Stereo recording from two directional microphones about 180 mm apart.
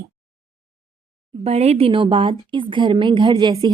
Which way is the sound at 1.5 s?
35° right (ahead or behind).